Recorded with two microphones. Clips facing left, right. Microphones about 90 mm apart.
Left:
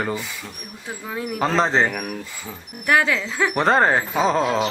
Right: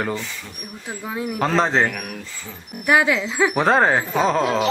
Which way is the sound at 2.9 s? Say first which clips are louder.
Right 2 dB; 15° right (ahead or behind).